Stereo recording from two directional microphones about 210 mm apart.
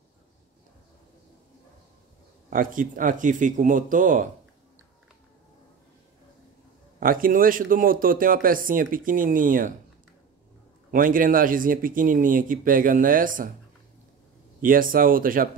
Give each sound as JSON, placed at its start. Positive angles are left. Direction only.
{"t": 2.5, "sound": "speech", "side_deg": -40}
{"t": 7.0, "sound": "speech", "side_deg": -40}
{"t": 10.9, "sound": "speech", "side_deg": -40}
{"t": 14.6, "sound": "speech", "side_deg": -40}